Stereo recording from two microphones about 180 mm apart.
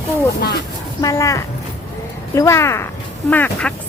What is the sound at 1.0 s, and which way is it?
A woman's voice, 15° left (ahead or behind).